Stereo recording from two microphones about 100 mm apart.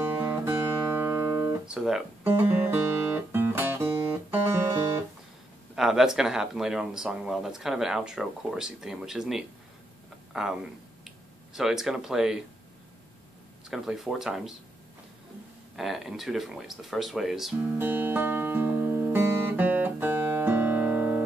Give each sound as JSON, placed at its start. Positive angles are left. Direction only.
{"t": 0.0, "sound": "music", "side_deg": -20}
{"t": 1.7, "sound": "speech", "side_deg": -5}
{"t": 2.2, "sound": "music", "side_deg": -20}
{"t": 5.8, "sound": "speech", "side_deg": -5}
{"t": 13.7, "sound": "speech", "side_deg": -5}
{"t": 15.7, "sound": "speech", "side_deg": 0}
{"t": 17.6, "sound": "music", "side_deg": -20}